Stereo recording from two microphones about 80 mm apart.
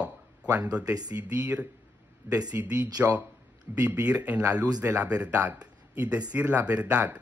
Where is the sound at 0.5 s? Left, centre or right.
Centre.